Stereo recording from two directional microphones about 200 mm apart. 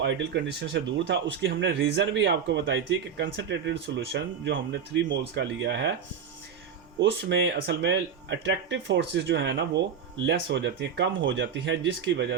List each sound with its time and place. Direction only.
0.0 s speech: 65° right (ahead or behind)
7.0 s speech: 60° right (ahead or behind)